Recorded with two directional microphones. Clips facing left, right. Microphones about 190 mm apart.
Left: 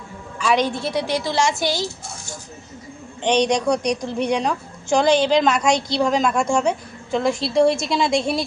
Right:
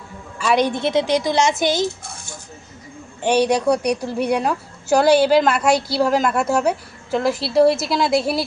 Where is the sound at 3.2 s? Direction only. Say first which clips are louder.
Right 2 dB; 5° right (ahead or behind).